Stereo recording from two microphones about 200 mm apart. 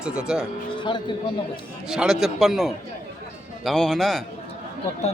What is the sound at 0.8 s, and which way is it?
Speech, 25° left (ahead or behind).